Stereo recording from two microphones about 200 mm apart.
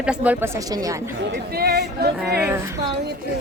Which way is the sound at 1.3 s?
50° right (ahead or behind).